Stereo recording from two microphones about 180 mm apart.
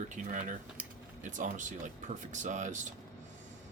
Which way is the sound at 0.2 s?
45° right (ahead or behind).